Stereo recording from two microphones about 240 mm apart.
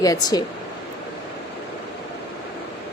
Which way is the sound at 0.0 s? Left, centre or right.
Centre.